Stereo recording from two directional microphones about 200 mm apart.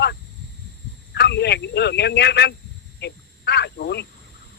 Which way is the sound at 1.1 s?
55° left (ahead or behind).